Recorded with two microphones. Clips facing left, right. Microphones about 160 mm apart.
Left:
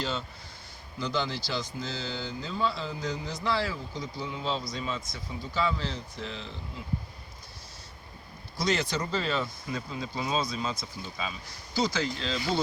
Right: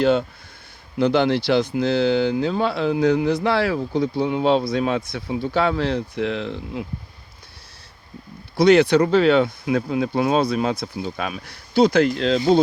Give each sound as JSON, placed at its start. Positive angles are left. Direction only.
{"t": 0.0, "sound": "speech", "side_deg": -60}
{"t": 8.5, "sound": "speech", "side_deg": -65}